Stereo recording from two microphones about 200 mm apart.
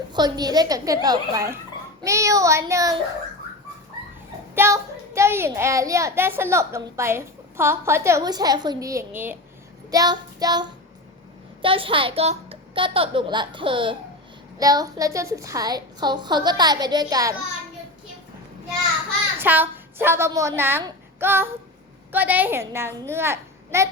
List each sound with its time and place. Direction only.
0.1 s a woman's voice: 20° right (ahead or behind)
4.5 s a child's voice: 15° right (ahead or behind)
19.4 s a woman's voice: 10° right (ahead or behind)